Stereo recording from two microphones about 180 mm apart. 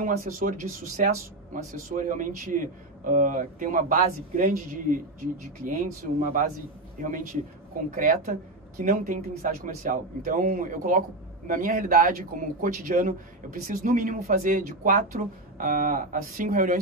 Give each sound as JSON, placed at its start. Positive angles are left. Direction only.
{"t": 0.0, "sound": "speech", "side_deg": -50}